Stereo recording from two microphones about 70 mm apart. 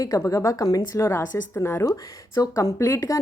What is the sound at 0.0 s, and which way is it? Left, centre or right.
A woman's voice, left.